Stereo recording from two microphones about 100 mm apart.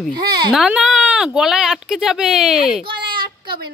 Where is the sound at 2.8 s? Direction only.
55° right (ahead or behind).